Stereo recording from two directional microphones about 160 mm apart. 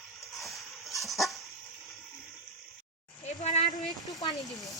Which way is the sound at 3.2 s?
50° left (ahead or behind).